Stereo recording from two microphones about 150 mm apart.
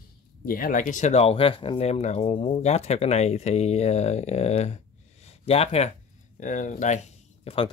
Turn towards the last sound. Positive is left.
turn(degrees=45)  # may be behind; listen again after turning